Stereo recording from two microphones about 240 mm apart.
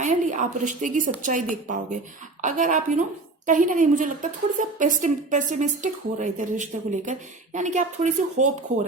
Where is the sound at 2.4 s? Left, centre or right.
Right.